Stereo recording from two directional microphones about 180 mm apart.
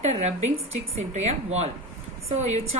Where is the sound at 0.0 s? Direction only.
40° right (ahead or behind).